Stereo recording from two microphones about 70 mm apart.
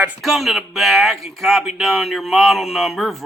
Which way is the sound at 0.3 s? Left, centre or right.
Centre.